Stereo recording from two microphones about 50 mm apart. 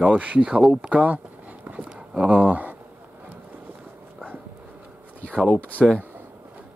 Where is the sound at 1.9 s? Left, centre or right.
Right.